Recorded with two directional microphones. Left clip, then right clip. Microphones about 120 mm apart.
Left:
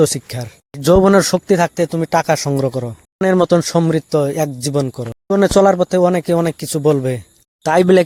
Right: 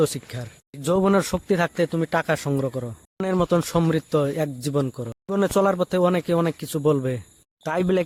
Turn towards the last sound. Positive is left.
turn(degrees=50)  # may be behind; listen again after turning